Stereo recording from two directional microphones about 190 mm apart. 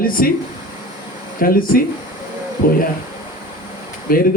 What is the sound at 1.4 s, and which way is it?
Speech, 50° left (ahead or behind).